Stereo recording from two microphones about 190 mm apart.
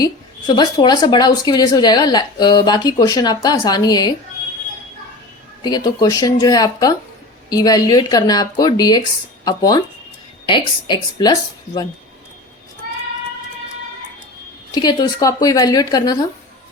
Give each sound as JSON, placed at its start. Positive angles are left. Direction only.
{"t": 0.0, "sound": "a woman's voice", "side_deg": 20}
{"t": 5.6, "sound": "a woman's voice", "side_deg": 20}
{"t": 14.7, "sound": "a woman's voice", "side_deg": 20}